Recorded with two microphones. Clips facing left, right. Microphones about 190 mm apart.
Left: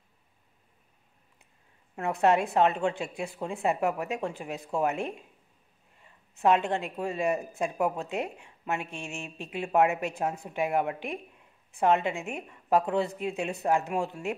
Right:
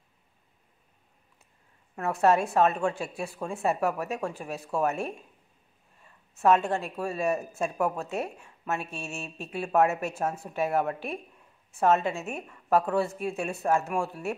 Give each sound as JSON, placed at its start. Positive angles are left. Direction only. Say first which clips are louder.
{"t": 2.0, "sound": "a woman's voice", "louder": "right 1 dB", "side_deg": 20}
{"t": 6.3, "sound": "a woman's voice", "louder": "right 1 dB", "side_deg": 20}